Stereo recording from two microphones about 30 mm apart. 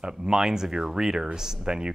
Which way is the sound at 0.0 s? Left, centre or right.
Centre.